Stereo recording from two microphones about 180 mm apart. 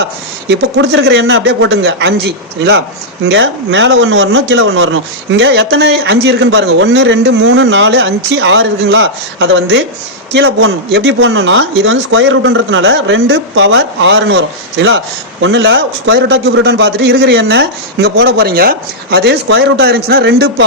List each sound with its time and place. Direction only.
0.4 s a man's voice: 70° right (ahead or behind)
3.2 s a man's voice: 85° right; by 20.7 s 65° right (ahead or behind)